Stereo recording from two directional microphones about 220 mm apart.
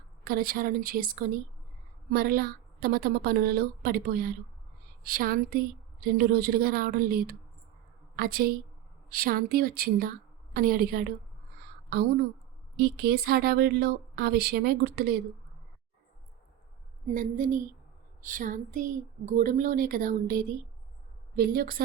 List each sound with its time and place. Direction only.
0.3 s a woman's voice: 40° right (ahead or behind)
17.2 s speech: 35° right (ahead or behind)